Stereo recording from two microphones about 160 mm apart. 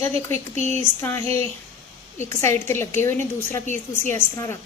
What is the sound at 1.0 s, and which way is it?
A woman's voice, 15° left (ahead or behind).